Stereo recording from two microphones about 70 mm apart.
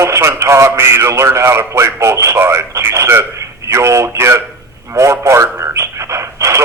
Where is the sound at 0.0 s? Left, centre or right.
Right.